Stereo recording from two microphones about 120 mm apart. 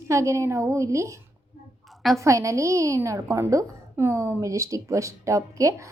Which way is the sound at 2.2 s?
25° right (ahead or behind).